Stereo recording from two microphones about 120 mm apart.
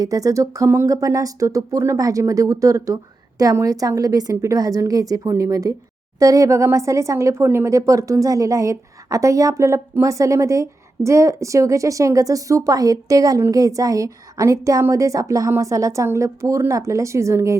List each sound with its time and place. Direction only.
0.0 s speech: 30° right (ahead or behind)